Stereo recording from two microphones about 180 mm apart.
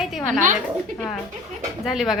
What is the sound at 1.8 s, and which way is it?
Speech, centre (ahead or behind).